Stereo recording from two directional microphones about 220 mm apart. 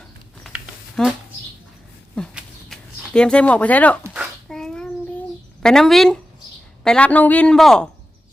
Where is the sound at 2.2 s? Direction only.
Centre (ahead or behind).